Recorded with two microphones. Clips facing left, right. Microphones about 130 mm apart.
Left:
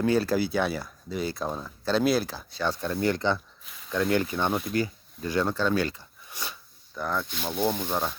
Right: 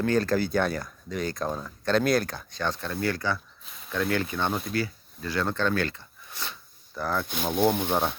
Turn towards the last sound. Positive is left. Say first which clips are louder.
# right 4 dB
turn(degrees=-55)  # may be behind; listen again after turning